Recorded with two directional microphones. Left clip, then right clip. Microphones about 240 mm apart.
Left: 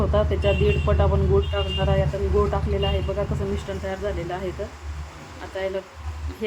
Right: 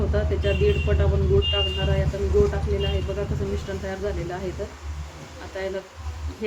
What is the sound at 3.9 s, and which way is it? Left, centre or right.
Speech, centre.